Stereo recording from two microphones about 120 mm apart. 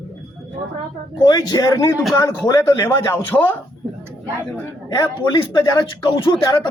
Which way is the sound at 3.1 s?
15° left (ahead or behind).